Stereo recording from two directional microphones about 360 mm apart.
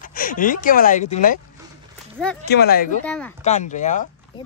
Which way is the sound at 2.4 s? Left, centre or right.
Left.